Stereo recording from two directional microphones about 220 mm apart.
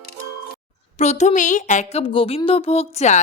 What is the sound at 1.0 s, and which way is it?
Speech, 30° left (ahead or behind).